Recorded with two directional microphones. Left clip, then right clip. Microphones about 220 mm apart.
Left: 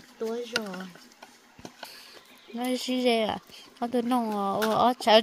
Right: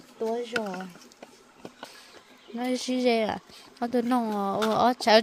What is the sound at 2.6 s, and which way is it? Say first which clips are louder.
Speech: even; 5° right (ahead or behind).